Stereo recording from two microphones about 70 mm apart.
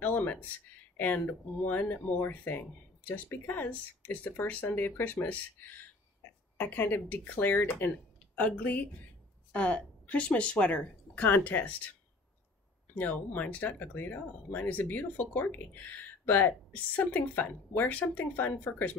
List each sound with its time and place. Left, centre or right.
0.0 s a sound: left
0.9 s speech: left
12.9 s speech: left